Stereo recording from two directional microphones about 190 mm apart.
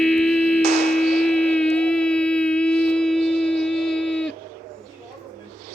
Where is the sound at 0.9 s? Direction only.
Centre (ahead or behind).